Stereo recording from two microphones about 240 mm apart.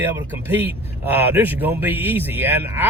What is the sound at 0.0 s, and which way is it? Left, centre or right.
Speech, centre.